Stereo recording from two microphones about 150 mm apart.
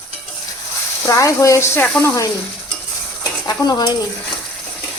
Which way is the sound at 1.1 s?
20° left (ahead or behind).